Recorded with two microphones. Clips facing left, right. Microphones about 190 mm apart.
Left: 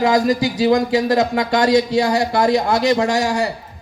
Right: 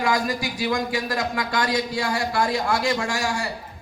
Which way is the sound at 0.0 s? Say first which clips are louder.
Left 8 dB; 20° left (ahead or behind).